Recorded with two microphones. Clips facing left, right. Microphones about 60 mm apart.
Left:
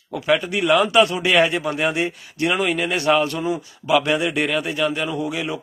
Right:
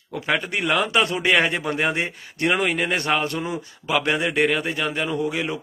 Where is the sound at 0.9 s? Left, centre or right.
Right.